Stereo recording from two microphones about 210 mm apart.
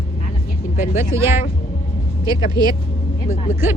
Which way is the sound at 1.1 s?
15° right (ahead or behind).